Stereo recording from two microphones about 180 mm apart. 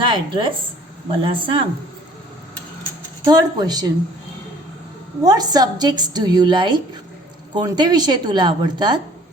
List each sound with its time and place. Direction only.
0.0 s speech: 30° right (ahead or behind)
3.2 s a woman's voice: 20° right (ahead or behind)
5.2 s a woman's voice: 20° right (ahead or behind)